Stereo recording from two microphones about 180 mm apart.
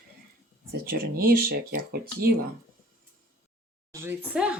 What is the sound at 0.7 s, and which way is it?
Speech, 55° right (ahead or behind).